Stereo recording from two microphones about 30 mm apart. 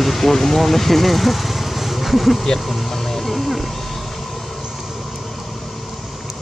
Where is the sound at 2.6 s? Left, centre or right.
Centre.